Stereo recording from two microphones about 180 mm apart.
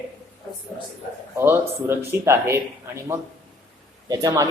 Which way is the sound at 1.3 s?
15° right (ahead or behind).